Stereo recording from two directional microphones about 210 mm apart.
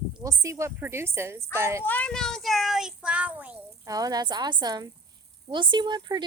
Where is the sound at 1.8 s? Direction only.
5° left (ahead or behind); by 6.2 s 20° right (ahead or behind).